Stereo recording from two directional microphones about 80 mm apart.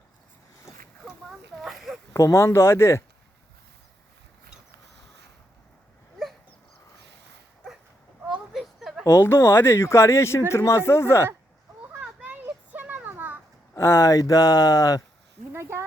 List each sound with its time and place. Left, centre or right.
1.0 s a sound: centre
2.1 s speech: left
8.2 s a sound: centre
9.0 s speech: left
11.9 s children playing: centre
13.7 s speech: left